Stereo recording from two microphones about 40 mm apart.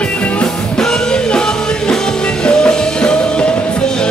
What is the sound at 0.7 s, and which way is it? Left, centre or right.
Music, centre.